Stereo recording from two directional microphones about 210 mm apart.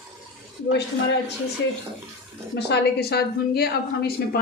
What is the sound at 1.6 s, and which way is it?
Speech, 55° left (ahead or behind).